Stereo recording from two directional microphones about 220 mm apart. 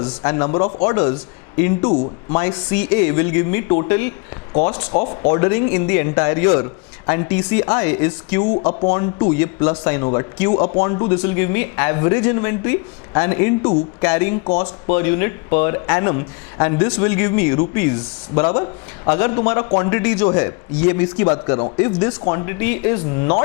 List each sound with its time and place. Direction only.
0.0 s a man's voice: 20° left (ahead or behind)
4.5 s a man's voice: 35° left (ahead or behind); by 8.4 s 15° left (ahead or behind)
8.5 s a man's voice: 25° left (ahead or behind)
11.2 s speech: 15° left (ahead or behind)
14.4 s a man's voice: 25° left (ahead or behind)